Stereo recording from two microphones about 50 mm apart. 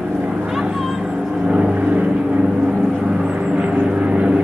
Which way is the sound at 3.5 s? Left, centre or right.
Right.